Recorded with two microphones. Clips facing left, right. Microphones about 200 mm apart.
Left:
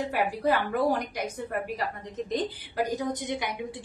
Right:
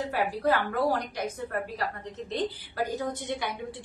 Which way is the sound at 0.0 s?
15° left (ahead or behind).